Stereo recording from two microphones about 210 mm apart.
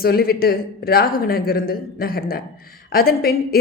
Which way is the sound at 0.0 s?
45° left (ahead or behind).